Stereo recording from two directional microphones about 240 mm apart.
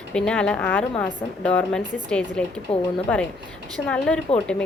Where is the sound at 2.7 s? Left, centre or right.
Left.